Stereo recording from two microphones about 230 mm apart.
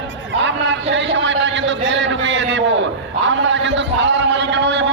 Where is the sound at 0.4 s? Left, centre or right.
Right.